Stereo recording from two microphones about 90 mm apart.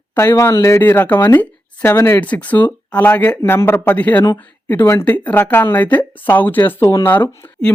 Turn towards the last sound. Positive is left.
turn(degrees=20)  # may be behind; listen again after turning